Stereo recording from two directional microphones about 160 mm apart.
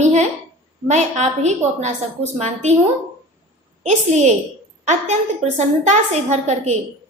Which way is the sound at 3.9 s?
45° right (ahead or behind).